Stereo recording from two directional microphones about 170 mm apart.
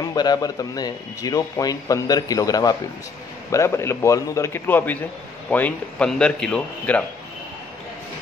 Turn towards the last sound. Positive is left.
turn(degrees=5)  # may be behind; listen again after turning